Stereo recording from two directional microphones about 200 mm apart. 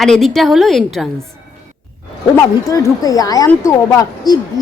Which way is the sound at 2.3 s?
15° left (ahead or behind).